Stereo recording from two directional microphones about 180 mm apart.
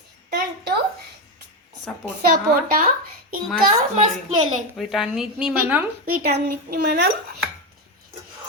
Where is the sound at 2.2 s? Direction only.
55° right (ahead or behind).